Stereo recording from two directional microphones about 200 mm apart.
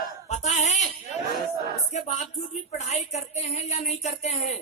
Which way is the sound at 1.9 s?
35° left (ahead or behind).